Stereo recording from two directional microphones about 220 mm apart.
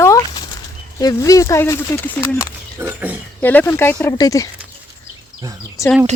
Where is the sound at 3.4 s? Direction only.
10° left (ahead or behind).